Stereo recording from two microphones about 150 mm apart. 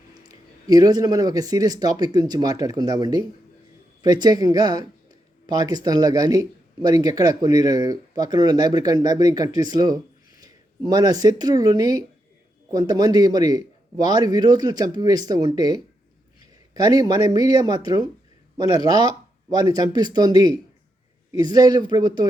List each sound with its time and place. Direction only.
0.1 s speech: 25° right (ahead or behind)